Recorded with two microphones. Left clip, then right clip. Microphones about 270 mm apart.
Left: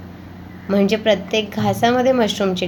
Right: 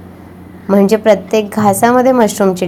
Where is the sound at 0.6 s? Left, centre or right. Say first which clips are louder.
Right 7 dB; right.